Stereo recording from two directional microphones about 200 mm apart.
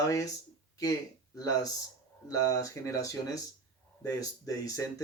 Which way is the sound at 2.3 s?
15° left (ahead or behind).